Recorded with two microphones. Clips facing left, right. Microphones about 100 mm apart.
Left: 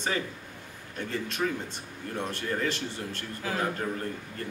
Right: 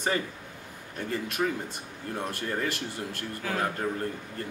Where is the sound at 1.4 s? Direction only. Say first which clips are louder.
Right 1 dB; 10° right (ahead or behind).